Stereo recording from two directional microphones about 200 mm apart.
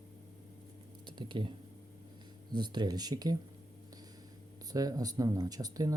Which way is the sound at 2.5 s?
20° right (ahead or behind).